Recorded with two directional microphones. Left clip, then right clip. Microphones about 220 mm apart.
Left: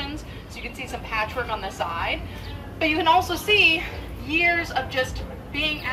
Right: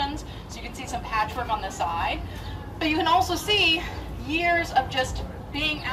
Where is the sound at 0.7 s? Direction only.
20° right (ahead or behind).